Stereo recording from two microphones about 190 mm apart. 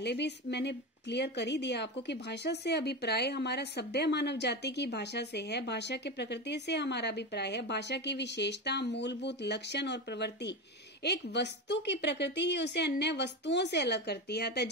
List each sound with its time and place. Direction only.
0.0 s a woman's voice: 65° left (ahead or behind)